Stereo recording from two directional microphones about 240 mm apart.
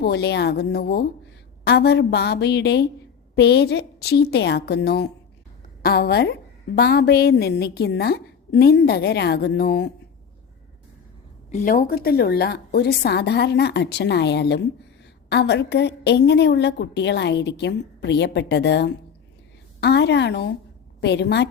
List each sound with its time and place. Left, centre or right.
0.0 s a woman's voice: left
11.5 s a woman's voice: left